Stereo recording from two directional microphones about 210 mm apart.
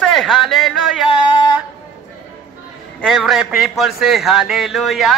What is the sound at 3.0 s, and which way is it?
A man's voice, centre (ahead or behind).